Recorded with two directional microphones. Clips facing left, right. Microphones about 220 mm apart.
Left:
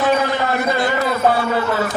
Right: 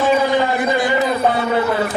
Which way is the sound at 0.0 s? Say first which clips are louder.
Right 2 dB; 10° right (ahead or behind).